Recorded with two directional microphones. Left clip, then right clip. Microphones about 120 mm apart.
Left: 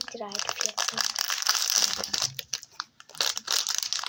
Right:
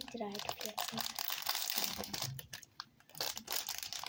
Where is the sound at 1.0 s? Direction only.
30° left (ahead or behind).